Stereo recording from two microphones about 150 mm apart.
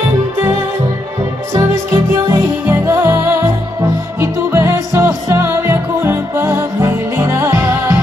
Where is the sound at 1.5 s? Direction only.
20° right (ahead or behind).